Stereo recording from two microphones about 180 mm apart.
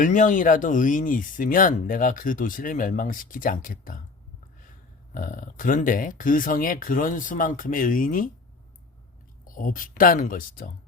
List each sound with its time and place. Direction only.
0.0 s speech: 45° left (ahead or behind)
5.1 s speech: 50° left (ahead or behind)
9.4 s speech: 50° left (ahead or behind)